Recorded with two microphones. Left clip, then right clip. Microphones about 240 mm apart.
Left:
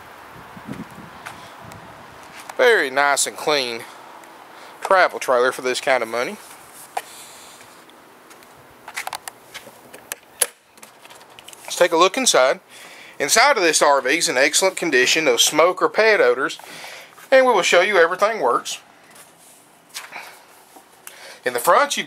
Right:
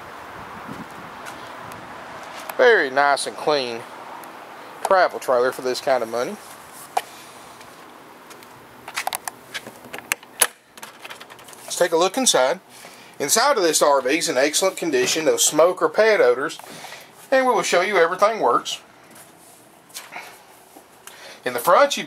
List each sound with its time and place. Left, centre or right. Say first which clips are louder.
2.5 s speech: even; centre
4.8 s speech: left 1 dB; centre
9.5 s a sound: right 5 dB; centre
11.6 s speech: left 3 dB; centre
12.2 s speech: left 2 dB; centre
21.5 s speech: even; centre